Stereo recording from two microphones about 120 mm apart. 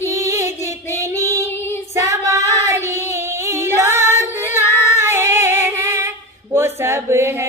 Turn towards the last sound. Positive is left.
turn(degrees=-20)  # may be behind; listen again after turning